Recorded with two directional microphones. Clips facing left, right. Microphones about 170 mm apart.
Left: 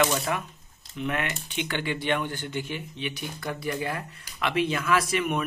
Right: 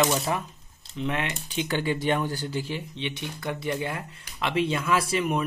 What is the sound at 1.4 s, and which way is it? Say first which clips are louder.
Speech: right 3 dB; 40° right (ahead or behind).